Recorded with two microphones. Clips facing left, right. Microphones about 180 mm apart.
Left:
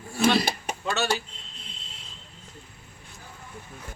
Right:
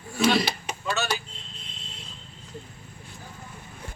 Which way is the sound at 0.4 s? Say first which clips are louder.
Left 1 dB; 50° left (ahead or behind).